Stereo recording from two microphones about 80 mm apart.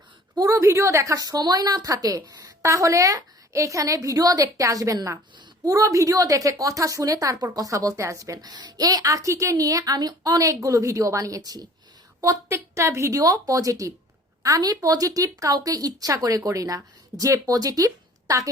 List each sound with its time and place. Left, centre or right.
0.3 s a woman's voice: right
12.5 s a woman's voice: right